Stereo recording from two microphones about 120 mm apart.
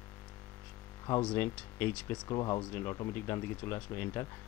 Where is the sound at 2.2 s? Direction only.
30° left (ahead or behind).